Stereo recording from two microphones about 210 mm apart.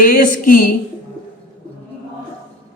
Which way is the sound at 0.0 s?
40° left (ahead or behind).